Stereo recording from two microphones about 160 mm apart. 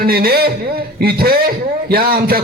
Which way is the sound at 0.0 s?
70° right (ahead or behind).